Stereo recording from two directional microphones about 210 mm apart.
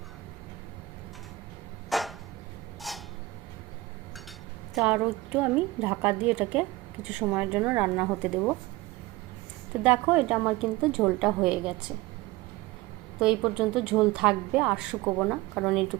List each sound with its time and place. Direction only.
1.9 s a sound: centre (ahead or behind)
4.7 s a woman's voice: 5° right (ahead or behind)
9.8 s a woman's voice: 5° right (ahead or behind)
13.1 s a woman's voice: 5° right (ahead or behind)